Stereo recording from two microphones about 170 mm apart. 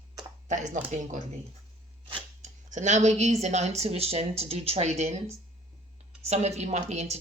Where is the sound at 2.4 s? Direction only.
45° right (ahead or behind).